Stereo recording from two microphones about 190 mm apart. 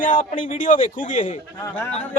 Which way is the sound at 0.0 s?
45° left (ahead or behind).